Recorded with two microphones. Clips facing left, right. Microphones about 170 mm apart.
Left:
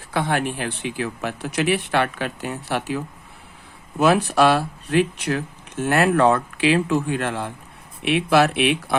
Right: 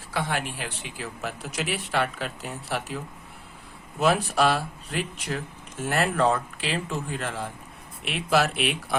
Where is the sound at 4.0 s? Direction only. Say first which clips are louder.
Left 5 dB; 75° left (ahead or behind).